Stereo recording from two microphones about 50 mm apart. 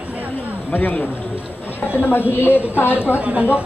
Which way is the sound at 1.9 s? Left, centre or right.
Left.